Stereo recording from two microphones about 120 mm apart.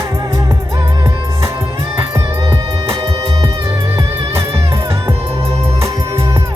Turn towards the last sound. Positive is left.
turn(degrees=-25)  # may be behind; listen again after turning